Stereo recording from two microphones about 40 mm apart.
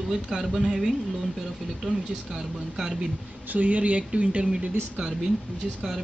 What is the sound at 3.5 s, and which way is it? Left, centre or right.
Speech, right.